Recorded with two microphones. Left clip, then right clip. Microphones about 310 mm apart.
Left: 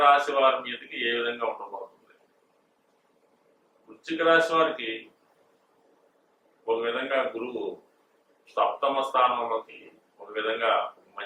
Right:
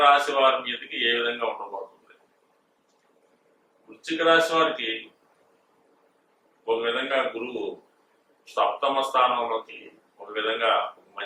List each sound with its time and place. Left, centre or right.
0.0 s speech: centre
1.6 s speech: left
4.2 s speech: centre
6.7 s speech: centre
7.5 s speech: left
8.5 s speech: centre